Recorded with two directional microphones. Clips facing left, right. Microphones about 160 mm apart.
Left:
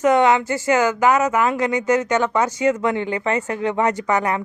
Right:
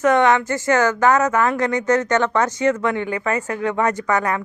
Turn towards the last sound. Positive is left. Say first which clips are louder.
# even
turn(degrees=20)  # may be behind; listen again after turning